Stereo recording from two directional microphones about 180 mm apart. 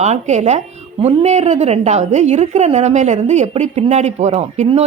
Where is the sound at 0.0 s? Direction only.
40° right (ahead or behind).